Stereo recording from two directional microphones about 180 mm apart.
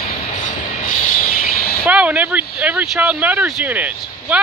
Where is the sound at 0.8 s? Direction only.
50° left (ahead or behind).